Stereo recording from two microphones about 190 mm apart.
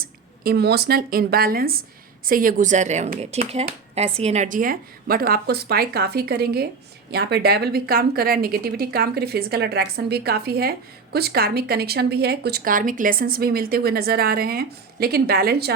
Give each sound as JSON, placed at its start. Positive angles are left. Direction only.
{"t": 0.0, "sound": "a woman's voice", "side_deg": -55}